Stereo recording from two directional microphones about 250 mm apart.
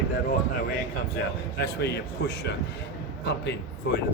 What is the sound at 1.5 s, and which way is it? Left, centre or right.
Speech, left.